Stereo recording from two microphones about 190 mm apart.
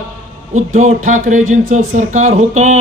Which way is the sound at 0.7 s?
40° right (ahead or behind).